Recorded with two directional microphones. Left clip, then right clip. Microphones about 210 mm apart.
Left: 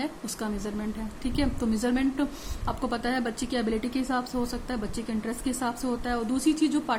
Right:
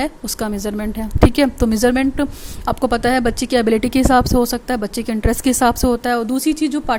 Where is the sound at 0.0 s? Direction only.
40° right (ahead or behind).